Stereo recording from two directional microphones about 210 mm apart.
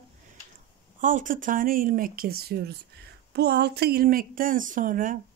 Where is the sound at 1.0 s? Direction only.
40° right (ahead or behind).